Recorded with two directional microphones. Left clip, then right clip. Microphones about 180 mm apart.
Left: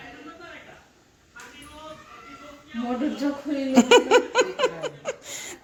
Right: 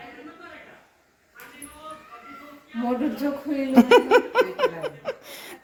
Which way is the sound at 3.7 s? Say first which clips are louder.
Right 1 dB; 5° left (ahead or behind).